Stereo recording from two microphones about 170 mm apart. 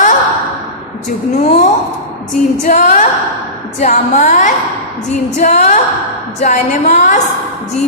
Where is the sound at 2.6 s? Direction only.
45° left (ahead or behind).